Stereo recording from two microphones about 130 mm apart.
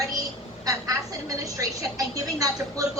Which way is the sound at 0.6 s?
25° right (ahead or behind).